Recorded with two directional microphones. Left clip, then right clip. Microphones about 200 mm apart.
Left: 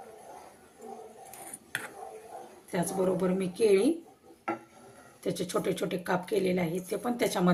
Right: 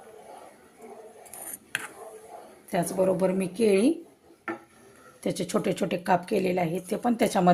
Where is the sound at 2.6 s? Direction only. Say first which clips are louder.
Right 5 dB; 55° right (ahead or behind).